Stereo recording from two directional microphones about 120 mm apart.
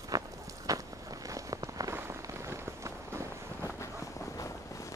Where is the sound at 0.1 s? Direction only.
30° right (ahead or behind).